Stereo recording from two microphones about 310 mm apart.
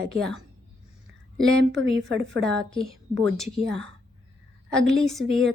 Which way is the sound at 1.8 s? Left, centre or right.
Right.